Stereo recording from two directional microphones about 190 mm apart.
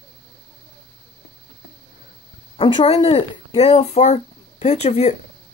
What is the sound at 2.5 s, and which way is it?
Speech, 30° left (ahead or behind).